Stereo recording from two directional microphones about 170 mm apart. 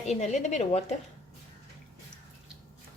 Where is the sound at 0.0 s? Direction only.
40° left (ahead or behind).